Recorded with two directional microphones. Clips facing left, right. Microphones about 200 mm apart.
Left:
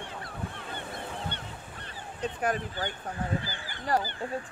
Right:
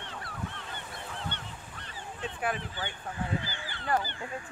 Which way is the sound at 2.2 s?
40° left (ahead or behind).